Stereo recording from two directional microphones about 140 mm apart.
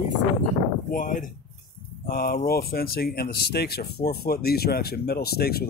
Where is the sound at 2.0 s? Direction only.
90° left.